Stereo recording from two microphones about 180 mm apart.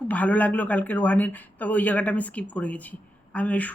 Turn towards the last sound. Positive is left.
turn(degrees=5)  # may be behind; listen again after turning